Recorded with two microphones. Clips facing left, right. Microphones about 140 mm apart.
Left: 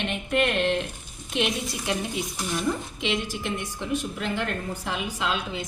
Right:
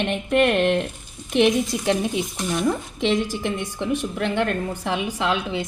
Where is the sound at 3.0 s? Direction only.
55° right (ahead or behind).